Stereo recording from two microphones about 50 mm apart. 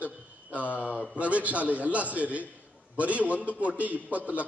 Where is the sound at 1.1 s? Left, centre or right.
Right.